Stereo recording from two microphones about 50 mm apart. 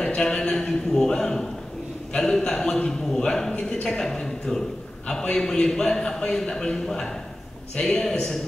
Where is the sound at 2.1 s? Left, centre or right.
Centre.